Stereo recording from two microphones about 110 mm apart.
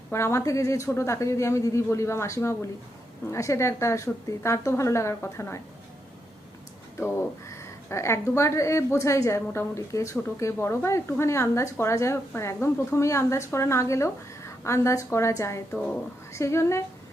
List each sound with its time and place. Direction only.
0.1 s a woman's voice: 25° left (ahead or behind)
7.0 s a woman's voice: 25° left (ahead or behind)